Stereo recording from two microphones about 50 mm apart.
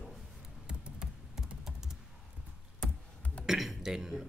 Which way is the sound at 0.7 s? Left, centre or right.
Centre.